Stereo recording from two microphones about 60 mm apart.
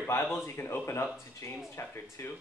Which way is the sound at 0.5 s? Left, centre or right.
Left.